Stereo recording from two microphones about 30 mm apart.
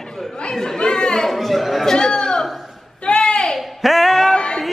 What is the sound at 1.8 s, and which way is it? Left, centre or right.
Speech, centre.